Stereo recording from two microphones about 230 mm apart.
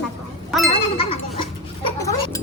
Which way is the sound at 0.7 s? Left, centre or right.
Left.